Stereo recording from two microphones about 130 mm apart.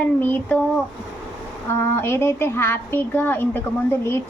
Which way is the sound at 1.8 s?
20° left (ahead or behind).